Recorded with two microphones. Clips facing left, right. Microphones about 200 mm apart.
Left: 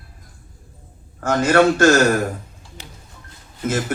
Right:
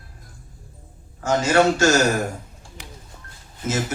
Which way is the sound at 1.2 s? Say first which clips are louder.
Left 3 dB; 55° left (ahead or behind).